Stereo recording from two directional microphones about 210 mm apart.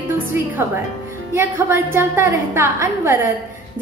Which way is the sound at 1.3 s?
10° right (ahead or behind).